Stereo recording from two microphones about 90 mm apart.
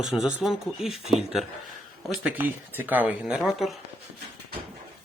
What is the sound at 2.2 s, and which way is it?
Speech, 20° right (ahead or behind).